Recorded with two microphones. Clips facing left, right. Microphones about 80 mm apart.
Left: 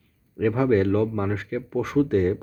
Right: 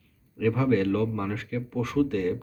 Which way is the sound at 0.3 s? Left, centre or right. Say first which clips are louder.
Left 3 dB; left.